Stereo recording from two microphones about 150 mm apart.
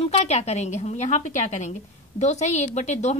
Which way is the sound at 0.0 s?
45° left (ahead or behind).